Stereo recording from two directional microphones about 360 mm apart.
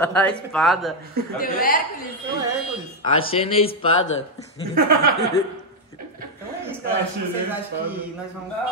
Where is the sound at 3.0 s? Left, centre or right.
Centre.